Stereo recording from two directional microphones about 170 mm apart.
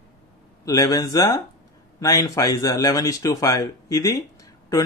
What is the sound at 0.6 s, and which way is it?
Speech, 20° left (ahead or behind).